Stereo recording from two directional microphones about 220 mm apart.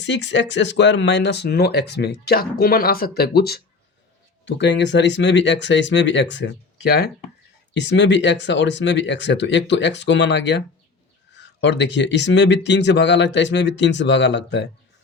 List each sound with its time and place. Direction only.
0.0 s speech: 55° left (ahead or behind)